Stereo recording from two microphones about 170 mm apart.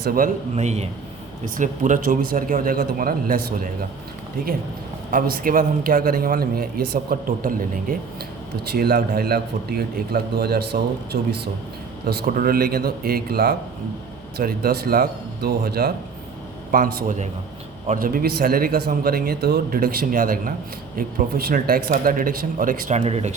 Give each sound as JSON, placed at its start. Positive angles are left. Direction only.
{"t": 0.0, "sound": "a man's voice", "side_deg": -60}
{"t": 0.5, "sound": "a man's voice", "side_deg": -40}
{"t": 5.1, "sound": "a man's voice", "side_deg": -55}
{"t": 16.7, "sound": "a man's voice", "side_deg": -50}
{"t": 23.0, "sound": "speech", "side_deg": -40}